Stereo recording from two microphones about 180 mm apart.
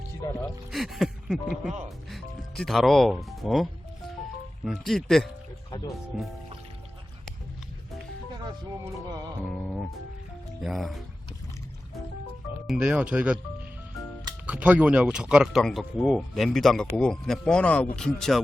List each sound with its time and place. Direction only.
0.7 s speech: centre (ahead or behind)
8.4 s speech: 20° right (ahead or behind)
9.5 s music: 5° left (ahead or behind)
10.6 s speech: centre (ahead or behind)
12.6 s speech: 5° right (ahead or behind)
14.4 s speech: 5° right (ahead or behind)